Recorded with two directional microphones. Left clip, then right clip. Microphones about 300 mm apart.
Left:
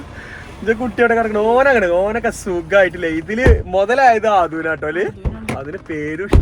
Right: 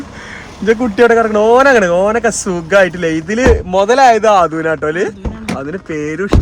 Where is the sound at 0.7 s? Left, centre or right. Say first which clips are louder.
Right 5 dB; right.